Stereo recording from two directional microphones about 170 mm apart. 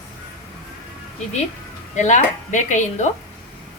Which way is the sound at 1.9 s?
45° left (ahead or behind).